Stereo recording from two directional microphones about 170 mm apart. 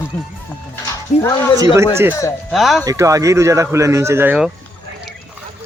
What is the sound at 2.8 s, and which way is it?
Speech, 20° right (ahead or behind).